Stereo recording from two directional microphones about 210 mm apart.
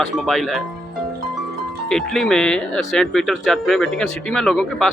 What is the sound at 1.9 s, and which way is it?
Speech, centre (ahead or behind).